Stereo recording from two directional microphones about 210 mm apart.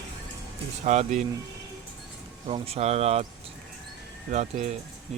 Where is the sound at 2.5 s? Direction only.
30° right (ahead or behind).